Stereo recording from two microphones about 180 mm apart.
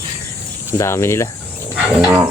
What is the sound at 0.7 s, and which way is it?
Speech, 15° left (ahead or behind).